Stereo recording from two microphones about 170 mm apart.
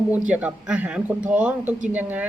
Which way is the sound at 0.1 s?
10° right (ahead or behind).